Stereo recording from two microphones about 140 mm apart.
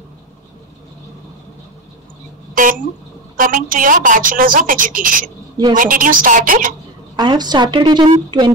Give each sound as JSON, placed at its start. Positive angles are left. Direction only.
{"t": 2.5, "sound": "a woman's voice", "side_deg": -75}
{"t": 7.2, "sound": "a woman's voice", "side_deg": -30}